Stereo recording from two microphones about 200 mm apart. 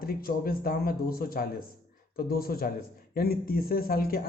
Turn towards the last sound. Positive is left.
turn(degrees=50)  # may be behind; listen again after turning